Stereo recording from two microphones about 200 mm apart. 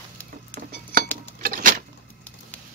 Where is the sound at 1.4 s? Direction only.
40° right (ahead or behind).